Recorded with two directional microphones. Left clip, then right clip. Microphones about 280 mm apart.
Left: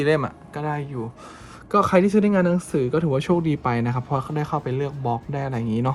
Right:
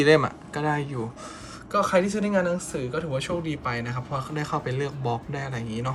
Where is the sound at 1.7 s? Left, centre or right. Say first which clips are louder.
Left 4 dB; centre.